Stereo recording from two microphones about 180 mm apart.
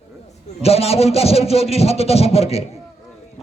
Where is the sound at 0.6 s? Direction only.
35° left (ahead or behind).